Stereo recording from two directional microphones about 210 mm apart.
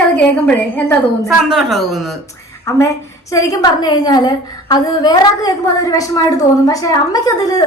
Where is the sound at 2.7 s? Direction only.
15° left (ahead or behind).